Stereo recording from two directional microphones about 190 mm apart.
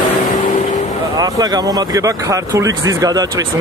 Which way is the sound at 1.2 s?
20° right (ahead or behind).